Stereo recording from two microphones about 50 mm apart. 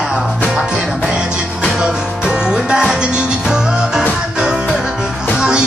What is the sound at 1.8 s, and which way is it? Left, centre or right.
Music, centre.